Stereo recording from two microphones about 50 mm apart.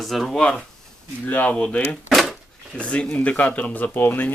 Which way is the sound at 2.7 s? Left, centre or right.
Left.